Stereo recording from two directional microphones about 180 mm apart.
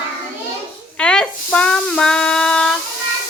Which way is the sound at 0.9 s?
5° left (ahead or behind).